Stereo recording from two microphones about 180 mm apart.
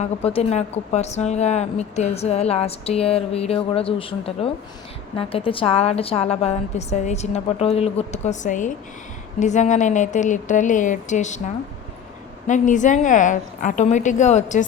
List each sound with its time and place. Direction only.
0.3 s a woman's voice: 35° left (ahead or behind)